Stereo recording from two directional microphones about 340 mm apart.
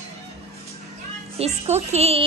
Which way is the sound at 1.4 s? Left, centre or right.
Centre.